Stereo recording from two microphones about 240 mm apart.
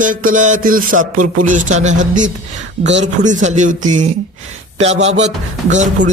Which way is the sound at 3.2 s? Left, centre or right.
Right.